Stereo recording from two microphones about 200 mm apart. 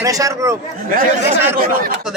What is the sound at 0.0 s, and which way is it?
Speech, 15° right (ahead or behind).